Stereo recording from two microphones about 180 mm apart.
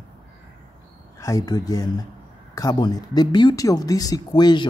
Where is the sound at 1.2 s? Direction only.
20° left (ahead or behind).